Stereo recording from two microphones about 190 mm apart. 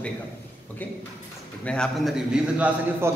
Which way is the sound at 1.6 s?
5° left (ahead or behind).